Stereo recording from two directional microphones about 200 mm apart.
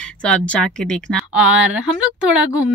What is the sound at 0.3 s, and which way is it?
A woman's voice, 5° left (ahead or behind).